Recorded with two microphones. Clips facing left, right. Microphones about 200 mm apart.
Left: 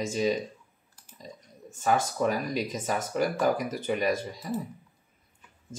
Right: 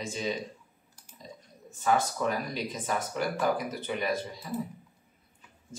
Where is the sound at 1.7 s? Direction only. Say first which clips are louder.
Left 1 dB; 45° left (ahead or behind).